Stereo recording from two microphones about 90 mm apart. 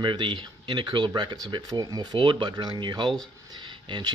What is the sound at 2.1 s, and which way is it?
Speech, 65° right (ahead or behind).